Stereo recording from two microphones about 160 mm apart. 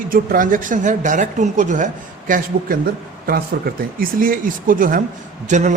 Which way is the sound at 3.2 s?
70° right (ahead or behind).